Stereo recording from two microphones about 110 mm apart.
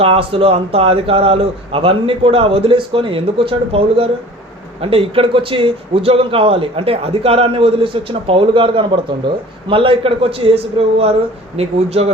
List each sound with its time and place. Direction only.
0.0 s a man's voice: 60° right (ahead or behind)